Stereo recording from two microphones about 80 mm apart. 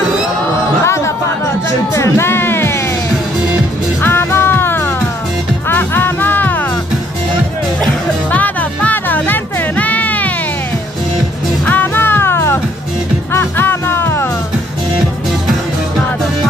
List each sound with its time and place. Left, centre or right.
0.8 s music: left
4.0 s music: left
8.3 s music: centre
11.6 s music: left